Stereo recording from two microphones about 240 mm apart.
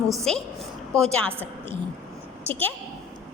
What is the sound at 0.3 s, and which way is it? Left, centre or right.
A woman's voice, centre.